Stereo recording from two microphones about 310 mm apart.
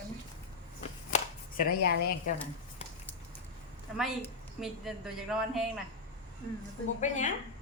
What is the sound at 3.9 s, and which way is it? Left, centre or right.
A woman's voice, centre.